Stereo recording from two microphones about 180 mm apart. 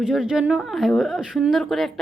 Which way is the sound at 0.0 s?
Centre (ahead or behind).